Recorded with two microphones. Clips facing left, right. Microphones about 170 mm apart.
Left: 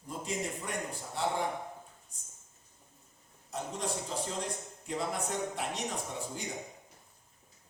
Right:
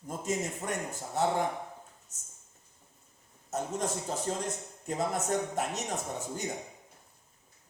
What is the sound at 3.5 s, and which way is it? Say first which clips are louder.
A man's voice: right 4 dB; 45° right (ahead or behind).